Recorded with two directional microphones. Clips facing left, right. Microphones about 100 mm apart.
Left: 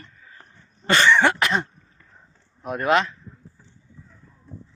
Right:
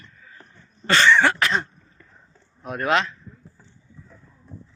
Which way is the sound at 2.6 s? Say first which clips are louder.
Left 2 dB; 5° left (ahead or behind).